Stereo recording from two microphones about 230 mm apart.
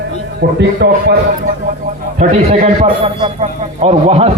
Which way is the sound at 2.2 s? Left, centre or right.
Right.